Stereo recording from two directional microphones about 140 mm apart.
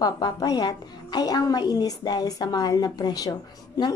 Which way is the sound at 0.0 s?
30° left (ahead or behind).